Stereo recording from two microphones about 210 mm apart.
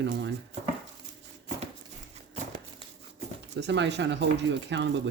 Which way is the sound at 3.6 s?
55° right (ahead or behind).